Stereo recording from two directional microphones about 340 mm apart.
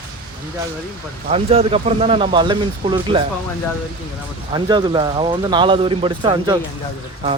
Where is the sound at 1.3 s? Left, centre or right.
Centre.